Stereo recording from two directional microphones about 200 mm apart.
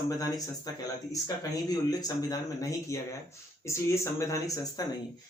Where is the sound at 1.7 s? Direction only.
20° left (ahead or behind).